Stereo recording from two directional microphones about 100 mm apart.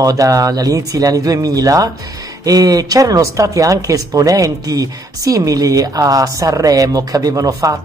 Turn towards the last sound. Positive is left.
turn(degrees=-35)  # may be behind; listen again after turning